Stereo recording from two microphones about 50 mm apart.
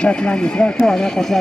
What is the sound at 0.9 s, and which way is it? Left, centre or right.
Speech, centre.